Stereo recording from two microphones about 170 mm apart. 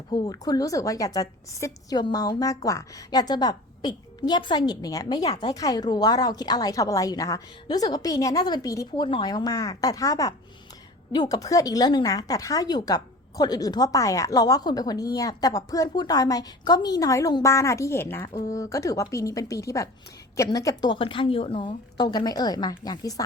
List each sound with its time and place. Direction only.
0.1 s speech: 20° left (ahead or behind)